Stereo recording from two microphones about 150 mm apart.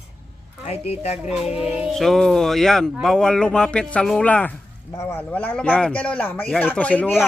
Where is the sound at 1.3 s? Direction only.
5° right (ahead or behind).